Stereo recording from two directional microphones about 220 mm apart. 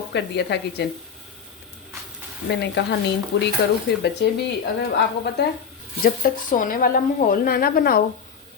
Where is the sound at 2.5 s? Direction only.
50° left (ahead or behind).